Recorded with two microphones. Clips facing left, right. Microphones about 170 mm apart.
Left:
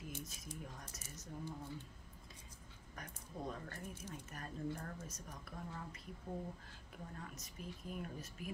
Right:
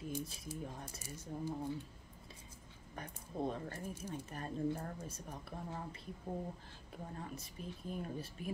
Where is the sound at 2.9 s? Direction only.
30° right (ahead or behind).